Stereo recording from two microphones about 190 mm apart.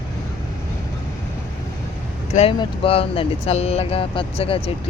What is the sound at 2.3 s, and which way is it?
Speech, 30° left (ahead or behind).